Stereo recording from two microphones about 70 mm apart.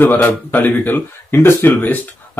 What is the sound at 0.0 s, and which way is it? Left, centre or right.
Speech, left.